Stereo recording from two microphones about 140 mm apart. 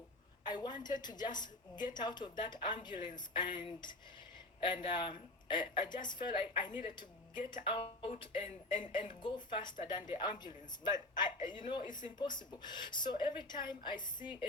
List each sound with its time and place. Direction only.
0.4 s speech: 30° left (ahead or behind)